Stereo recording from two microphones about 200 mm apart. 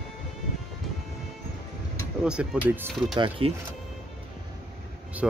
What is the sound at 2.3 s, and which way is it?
Speech, 5° right (ahead or behind).